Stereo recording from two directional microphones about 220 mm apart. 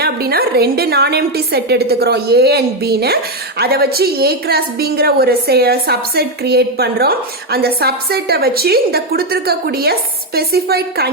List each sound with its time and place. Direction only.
0.0 s a woman's voice: 45° right (ahead or behind)